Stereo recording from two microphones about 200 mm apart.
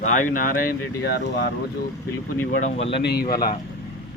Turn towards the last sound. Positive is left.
turn(degrees=50)  # may be behind; listen again after turning